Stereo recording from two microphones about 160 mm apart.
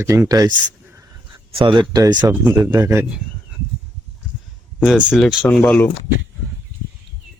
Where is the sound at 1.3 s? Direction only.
30° right (ahead or behind).